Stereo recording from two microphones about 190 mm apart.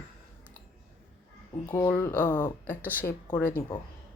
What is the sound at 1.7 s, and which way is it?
Speech, 15° left (ahead or behind).